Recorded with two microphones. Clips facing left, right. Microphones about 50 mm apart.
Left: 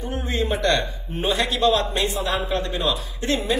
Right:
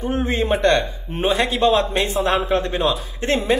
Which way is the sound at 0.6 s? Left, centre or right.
Right.